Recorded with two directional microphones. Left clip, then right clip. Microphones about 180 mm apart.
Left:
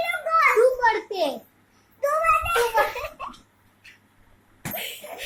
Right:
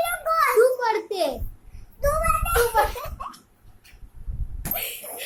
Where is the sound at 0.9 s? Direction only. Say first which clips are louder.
Left 1 dB; 5° right (ahead or behind).